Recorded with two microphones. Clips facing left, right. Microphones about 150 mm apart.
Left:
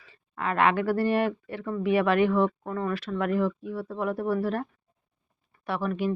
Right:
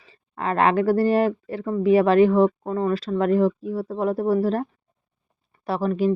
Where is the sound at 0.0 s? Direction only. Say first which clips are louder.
Right 4 dB; 35° right (ahead or behind).